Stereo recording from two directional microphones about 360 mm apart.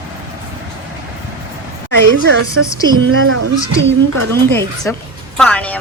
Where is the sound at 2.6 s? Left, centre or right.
Right.